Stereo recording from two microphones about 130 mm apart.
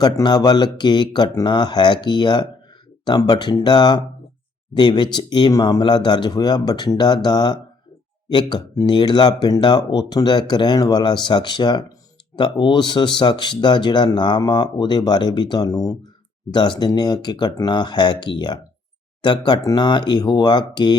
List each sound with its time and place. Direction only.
0.0 s speech: 35° left (ahead or behind)